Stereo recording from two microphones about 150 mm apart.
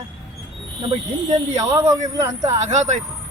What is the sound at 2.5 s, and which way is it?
Speech, 50° right (ahead or behind).